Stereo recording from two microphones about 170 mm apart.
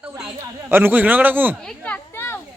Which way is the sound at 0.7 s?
10° right (ahead or behind).